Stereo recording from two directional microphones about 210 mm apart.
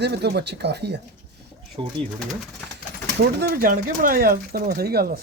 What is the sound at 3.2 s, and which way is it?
Speech, 45° right (ahead or behind).